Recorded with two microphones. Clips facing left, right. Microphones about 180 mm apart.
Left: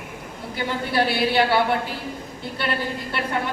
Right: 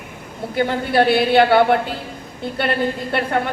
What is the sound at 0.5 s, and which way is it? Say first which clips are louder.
A woman's voice: right 6 dB; 55° right (ahead or behind).